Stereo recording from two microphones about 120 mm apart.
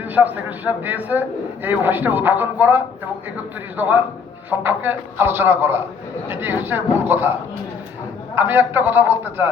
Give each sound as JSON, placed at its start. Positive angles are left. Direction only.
{"t": 0.0, "sound": "speech", "side_deg": -15}
{"t": 8.4, "sound": "a man's voice", "side_deg": -20}